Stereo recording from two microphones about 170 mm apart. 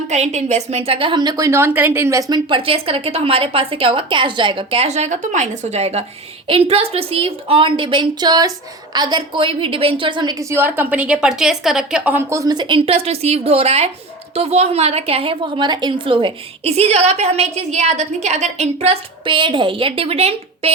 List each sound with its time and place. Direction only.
0.1 s a woman's voice: 40° right (ahead or behind)